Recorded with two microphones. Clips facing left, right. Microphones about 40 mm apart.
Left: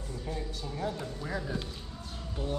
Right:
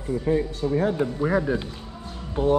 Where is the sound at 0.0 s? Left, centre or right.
Right.